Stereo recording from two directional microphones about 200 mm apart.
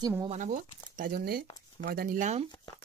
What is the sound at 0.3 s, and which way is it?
Speech, 40° right (ahead or behind).